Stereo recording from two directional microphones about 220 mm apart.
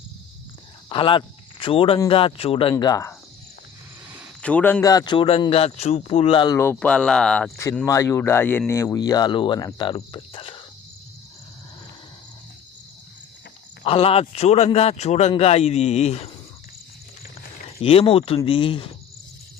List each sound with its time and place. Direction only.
0.9 s speech: 25° left (ahead or behind)
4.4 s a man's voice: 5° left (ahead or behind)
7.6 s a man's voice: 15° left (ahead or behind)
13.8 s speech: 25° left (ahead or behind)
17.8 s speech: 25° left (ahead or behind)